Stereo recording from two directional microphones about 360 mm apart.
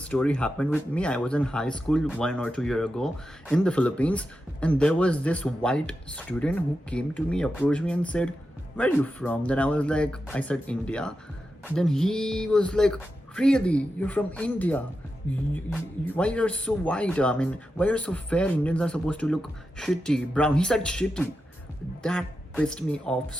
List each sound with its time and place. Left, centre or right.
0.0 s speech: centre